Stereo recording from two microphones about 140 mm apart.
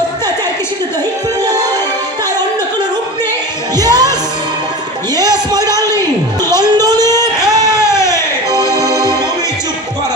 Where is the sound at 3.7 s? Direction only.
30° right (ahead or behind).